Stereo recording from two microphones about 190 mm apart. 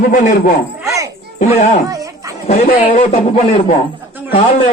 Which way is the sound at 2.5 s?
35° left (ahead or behind).